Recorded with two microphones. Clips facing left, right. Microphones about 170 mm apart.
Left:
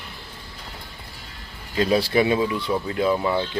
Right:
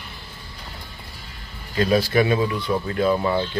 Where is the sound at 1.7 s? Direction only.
25° left (ahead or behind).